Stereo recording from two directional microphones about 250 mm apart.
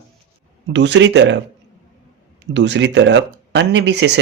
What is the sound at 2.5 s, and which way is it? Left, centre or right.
Speech, right.